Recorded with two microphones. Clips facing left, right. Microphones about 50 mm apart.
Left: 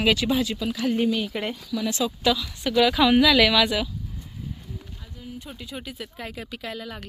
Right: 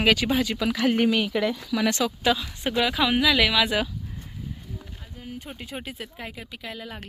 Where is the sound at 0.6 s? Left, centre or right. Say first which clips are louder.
Right 2 dB; right.